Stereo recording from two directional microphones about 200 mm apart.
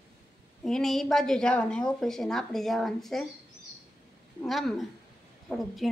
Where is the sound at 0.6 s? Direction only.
Centre (ahead or behind).